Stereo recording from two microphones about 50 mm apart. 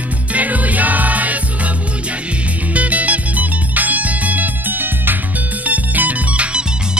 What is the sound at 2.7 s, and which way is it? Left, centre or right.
Music, right.